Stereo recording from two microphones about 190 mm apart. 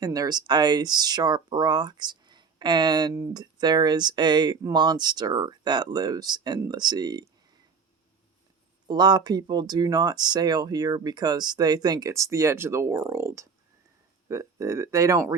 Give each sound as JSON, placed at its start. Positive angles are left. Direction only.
{"t": 0.0, "sound": "speech", "side_deg": -20}
{"t": 8.9, "sound": "speech", "side_deg": -20}